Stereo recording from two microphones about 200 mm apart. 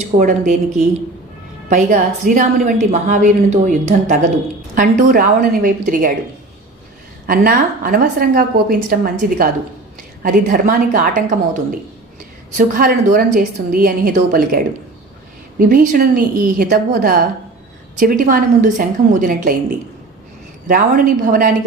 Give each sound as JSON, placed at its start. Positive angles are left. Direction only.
{"t": 0.0, "sound": "a woman's voice", "side_deg": -40}
{"t": 1.7, "sound": "a woman's voice", "side_deg": -40}
{"t": 7.3, "sound": "a woman's voice", "side_deg": -45}
{"t": 20.7, "sound": "a woman's voice", "side_deg": -45}